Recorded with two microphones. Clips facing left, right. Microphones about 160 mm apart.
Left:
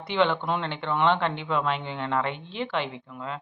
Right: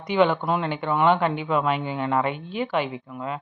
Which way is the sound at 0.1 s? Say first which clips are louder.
Right 4 dB; 10° right (ahead or behind).